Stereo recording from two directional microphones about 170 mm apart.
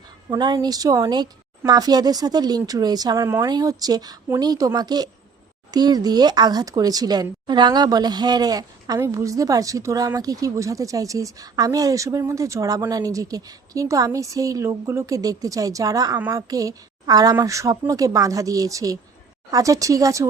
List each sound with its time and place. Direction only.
0.3 s speech: 25° right (ahead or behind)